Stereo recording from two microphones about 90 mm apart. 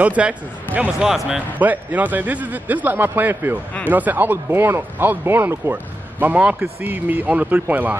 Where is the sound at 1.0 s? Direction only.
5° right (ahead or behind).